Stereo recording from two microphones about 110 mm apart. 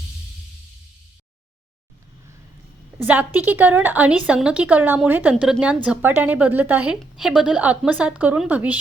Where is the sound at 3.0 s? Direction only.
15° right (ahead or behind).